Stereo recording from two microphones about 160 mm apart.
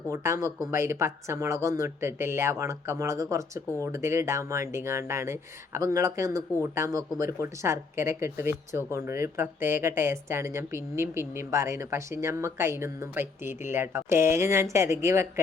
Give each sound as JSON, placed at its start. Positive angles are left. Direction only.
{"t": 0.1, "sound": "speech", "side_deg": -20}